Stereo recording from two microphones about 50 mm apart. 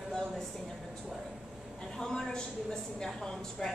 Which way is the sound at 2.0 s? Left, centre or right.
Centre.